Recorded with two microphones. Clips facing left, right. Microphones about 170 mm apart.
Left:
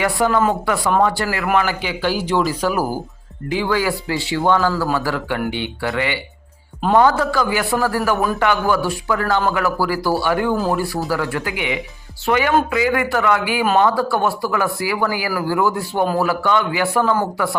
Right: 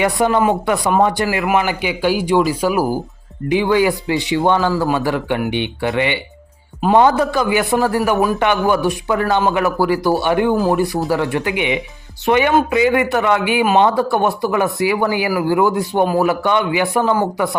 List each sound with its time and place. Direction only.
0.0 s a man's voice: 20° right (ahead or behind)